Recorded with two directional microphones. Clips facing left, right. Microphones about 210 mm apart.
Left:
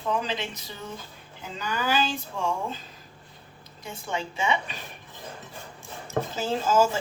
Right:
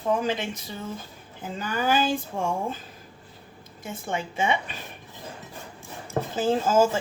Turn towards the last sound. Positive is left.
turn(degrees=-50)  # may be behind; listen again after turning